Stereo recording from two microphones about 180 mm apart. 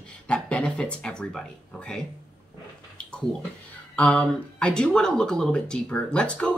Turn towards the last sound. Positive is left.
turn(degrees=5)  # may be behind; listen again after turning